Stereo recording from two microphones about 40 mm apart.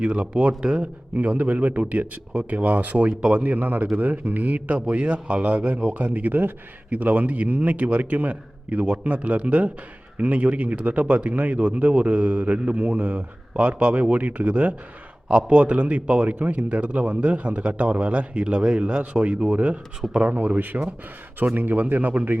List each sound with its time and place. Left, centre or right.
0.0 s a man's voice: right
2.3 s a man's voice: right
3.4 s a man's voice: right
6.1 s a man's voice: right